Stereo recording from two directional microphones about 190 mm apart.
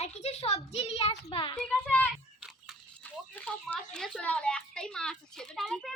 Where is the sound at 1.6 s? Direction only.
5° left (ahead or behind).